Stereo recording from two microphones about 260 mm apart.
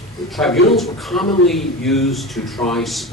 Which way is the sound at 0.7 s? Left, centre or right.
Centre.